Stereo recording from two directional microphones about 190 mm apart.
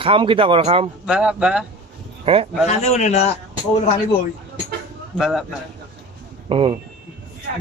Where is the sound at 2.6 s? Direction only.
35° left (ahead or behind).